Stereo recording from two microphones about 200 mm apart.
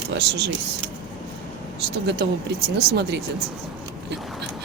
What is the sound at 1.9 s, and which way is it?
Speech, 55° right (ahead or behind).